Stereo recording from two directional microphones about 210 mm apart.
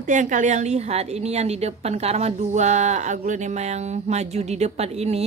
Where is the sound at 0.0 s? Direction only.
35° right (ahead or behind).